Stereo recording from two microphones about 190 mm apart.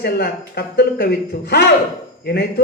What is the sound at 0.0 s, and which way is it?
A man's voice, 60° left (ahead or behind).